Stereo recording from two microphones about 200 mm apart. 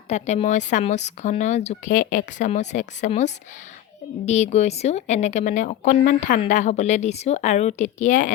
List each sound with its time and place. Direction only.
0.1 s speech: 35° left (ahead or behind)